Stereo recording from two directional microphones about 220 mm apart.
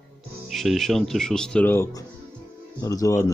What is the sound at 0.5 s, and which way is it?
Speech, centre (ahead or behind).